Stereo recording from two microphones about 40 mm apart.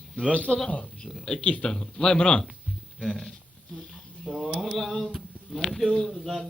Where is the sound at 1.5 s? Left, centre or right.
Left.